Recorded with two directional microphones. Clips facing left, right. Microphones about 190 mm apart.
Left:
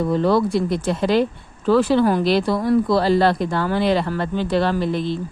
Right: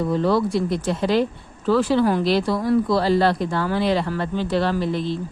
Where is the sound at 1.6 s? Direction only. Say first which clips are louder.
Left 2 dB; 60° left (ahead or behind).